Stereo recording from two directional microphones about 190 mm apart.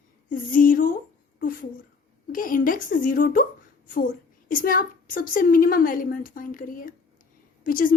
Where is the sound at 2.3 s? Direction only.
45° left (ahead or behind).